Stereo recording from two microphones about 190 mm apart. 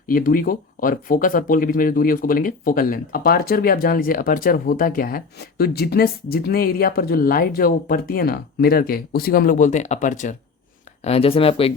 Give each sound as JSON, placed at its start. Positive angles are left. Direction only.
{"t": 0.1, "sound": "speech", "side_deg": 50}
{"t": 11.0, "sound": "speech", "side_deg": 30}